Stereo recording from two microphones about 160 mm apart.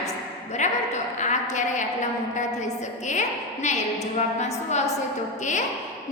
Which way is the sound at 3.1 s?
45° left (ahead or behind).